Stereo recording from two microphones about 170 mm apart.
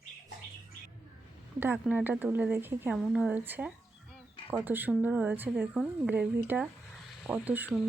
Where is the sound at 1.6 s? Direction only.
10° right (ahead or behind).